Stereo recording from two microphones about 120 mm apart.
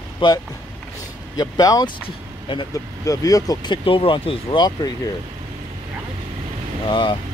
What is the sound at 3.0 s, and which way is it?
Speech, 30° left (ahead or behind).